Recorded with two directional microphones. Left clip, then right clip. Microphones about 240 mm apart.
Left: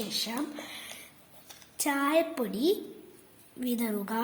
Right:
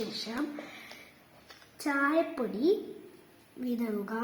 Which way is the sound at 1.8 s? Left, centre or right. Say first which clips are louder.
Left 1 dB; left.